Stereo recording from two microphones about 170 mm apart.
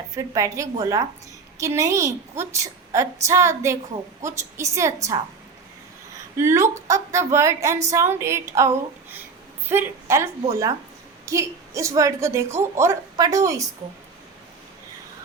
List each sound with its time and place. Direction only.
0.1 s a woman's voice: 20° right (ahead or behind)
6.3 s a woman's voice: 15° right (ahead or behind)